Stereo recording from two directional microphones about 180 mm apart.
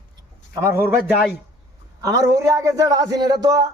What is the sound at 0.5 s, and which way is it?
Speech, 15° right (ahead or behind).